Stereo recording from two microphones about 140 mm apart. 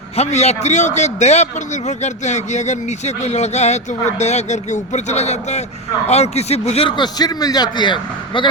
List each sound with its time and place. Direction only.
0.2 s a man's voice: 50° left (ahead or behind); by 7.9 s 30° left (ahead or behind)